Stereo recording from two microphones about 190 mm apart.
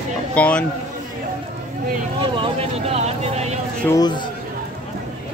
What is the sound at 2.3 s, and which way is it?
Speech, 30° right (ahead or behind).